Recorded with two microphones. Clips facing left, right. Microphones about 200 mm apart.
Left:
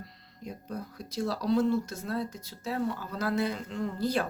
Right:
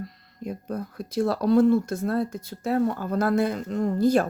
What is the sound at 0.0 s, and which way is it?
Speech, 50° right (ahead or behind).